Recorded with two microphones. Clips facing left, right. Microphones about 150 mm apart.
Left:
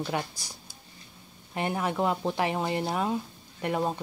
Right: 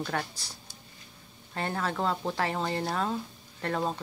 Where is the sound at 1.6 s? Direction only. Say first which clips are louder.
Left 3 dB; 15° left (ahead or behind).